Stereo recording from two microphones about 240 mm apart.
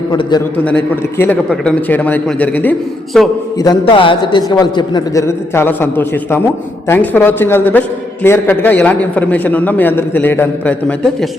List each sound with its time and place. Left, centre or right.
0.1 s a man's voice: centre
1.2 s a man's voice: centre
3.6 s a man's voice: centre